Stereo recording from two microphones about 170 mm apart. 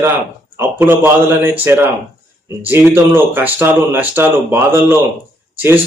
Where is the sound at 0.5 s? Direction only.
15° right (ahead or behind).